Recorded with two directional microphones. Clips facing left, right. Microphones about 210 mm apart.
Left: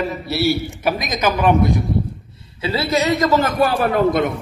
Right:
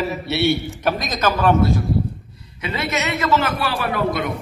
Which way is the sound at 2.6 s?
30° left (ahead or behind).